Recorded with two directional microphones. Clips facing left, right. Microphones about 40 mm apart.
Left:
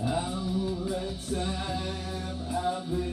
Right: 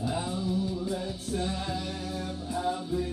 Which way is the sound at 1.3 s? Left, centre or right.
Centre.